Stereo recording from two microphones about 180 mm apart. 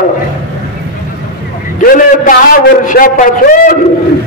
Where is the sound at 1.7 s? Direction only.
50° left (ahead or behind).